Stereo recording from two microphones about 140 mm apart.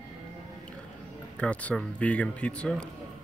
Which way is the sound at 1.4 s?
10° left (ahead or behind).